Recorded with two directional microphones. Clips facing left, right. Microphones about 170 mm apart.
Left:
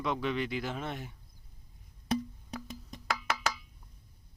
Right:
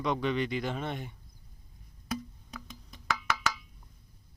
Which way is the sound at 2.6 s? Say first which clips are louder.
Right 2 dB; 35° left (ahead or behind).